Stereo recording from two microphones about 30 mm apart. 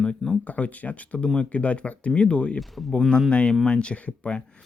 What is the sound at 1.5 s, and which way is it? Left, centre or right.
Speech, left.